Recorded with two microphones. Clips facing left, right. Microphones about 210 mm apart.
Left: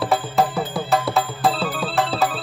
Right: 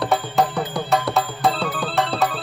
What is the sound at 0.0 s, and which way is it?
Music, centre (ahead or behind).